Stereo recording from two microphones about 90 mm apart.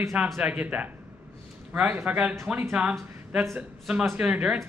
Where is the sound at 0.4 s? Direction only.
15° right (ahead or behind).